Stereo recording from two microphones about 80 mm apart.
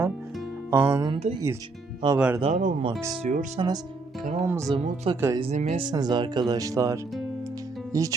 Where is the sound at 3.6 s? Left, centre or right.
Right.